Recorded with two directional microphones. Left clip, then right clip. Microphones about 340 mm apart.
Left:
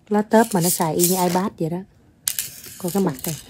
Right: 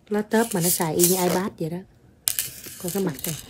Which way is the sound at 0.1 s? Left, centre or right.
Centre.